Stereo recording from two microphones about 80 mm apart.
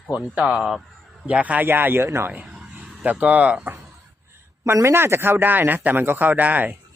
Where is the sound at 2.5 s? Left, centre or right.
Centre.